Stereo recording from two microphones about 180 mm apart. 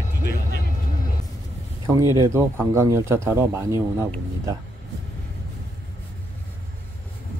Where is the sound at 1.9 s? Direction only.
15° right (ahead or behind).